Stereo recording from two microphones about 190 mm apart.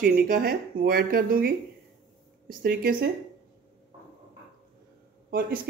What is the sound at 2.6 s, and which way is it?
Speech, 50° right (ahead or behind).